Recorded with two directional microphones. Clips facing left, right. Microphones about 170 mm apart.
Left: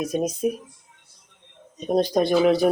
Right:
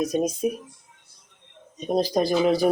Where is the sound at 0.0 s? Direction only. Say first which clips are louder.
Right 1 dB; 5° left (ahead or behind).